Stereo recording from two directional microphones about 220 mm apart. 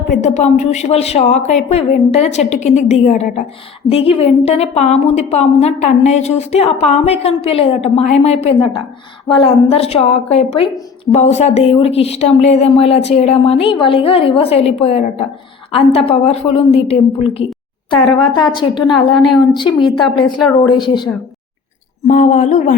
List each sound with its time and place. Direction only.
0.1 s a woman's voice: 35° left (ahead or behind)
19.1 s a woman's voice: centre (ahead or behind)
19.5 s a woman's voice: 20° left (ahead or behind)
22.0 s speech: 35° left (ahead or behind)